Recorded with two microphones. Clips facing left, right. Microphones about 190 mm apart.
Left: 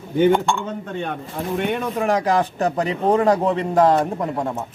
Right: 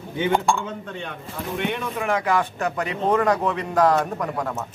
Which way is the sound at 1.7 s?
40° left (ahead or behind).